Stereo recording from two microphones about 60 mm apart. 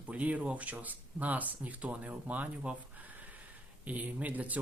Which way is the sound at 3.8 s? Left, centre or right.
Right.